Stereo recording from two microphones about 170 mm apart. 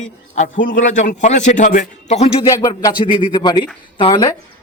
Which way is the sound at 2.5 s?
20° left (ahead or behind).